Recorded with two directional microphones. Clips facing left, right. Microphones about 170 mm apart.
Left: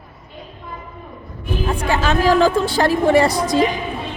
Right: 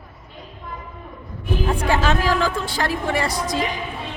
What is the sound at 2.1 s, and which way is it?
A woman's voice, 30° left (ahead or behind).